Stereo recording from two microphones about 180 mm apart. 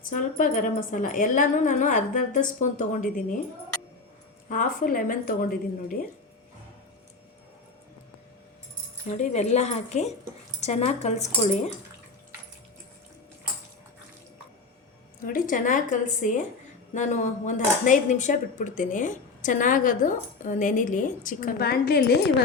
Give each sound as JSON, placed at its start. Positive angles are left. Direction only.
{"t": 0.1, "sound": "speech", "side_deg": 45}
{"t": 4.4, "sound": "speech", "side_deg": 50}
{"t": 9.0, "sound": "speech", "side_deg": 40}
{"t": 15.2, "sound": "speech", "side_deg": 50}